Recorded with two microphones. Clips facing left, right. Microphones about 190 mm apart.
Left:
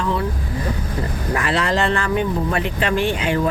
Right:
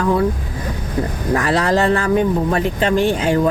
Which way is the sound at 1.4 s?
40° right (ahead or behind).